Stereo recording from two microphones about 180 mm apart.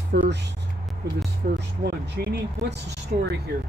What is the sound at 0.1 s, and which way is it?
Speech, 70° right (ahead or behind).